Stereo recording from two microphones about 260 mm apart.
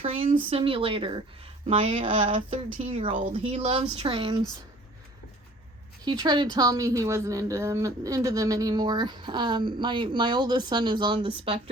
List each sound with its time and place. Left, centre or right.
0.0 s speech: right
6.1 s a woman's voice: centre